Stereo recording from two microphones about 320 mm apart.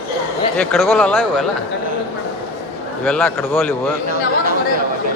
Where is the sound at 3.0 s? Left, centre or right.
Centre.